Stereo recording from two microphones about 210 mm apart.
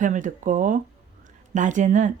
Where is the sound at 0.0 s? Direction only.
35° right (ahead or behind).